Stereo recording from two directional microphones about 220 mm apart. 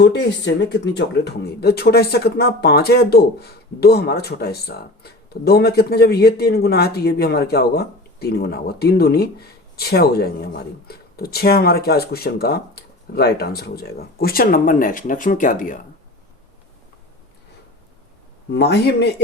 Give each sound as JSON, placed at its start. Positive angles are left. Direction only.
{"t": 0.0, "sound": "speech", "side_deg": 50}
{"t": 18.5, "sound": "speech", "side_deg": 50}